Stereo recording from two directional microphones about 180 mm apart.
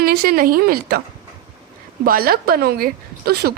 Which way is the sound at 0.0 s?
55° right (ahead or behind).